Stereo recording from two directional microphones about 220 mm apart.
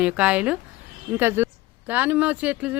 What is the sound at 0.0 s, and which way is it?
Speech, 5° right (ahead or behind).